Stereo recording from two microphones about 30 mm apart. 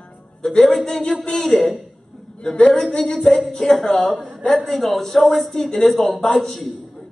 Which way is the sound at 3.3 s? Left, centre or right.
Left.